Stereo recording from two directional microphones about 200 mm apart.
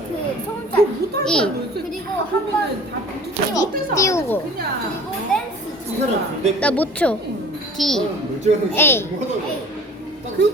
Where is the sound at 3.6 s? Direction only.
15° left (ahead or behind).